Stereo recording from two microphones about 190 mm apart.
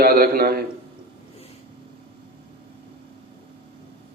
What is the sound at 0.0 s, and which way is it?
Speech, 55° right (ahead or behind).